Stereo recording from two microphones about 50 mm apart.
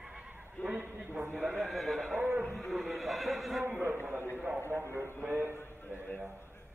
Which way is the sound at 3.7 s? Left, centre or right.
Right.